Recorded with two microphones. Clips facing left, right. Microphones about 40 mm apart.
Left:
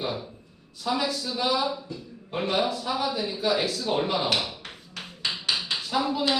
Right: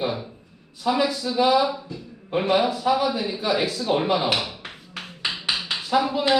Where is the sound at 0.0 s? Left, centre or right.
Centre.